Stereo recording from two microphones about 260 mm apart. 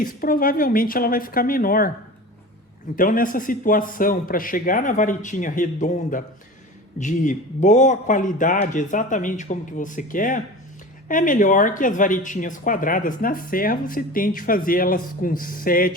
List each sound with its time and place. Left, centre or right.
0.0 s speech: left
2.9 s a man's voice: left